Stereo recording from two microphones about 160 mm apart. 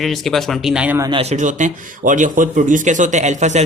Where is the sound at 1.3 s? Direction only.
50° right (ahead or behind).